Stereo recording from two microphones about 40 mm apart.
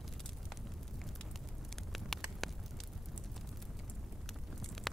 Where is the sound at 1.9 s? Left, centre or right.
Centre.